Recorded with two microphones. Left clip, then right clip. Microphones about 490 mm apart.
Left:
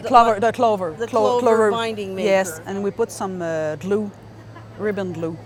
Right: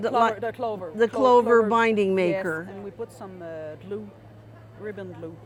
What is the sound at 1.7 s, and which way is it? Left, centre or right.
Speech, right.